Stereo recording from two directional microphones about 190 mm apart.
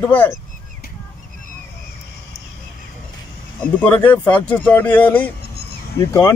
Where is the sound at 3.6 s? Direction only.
10° left (ahead or behind).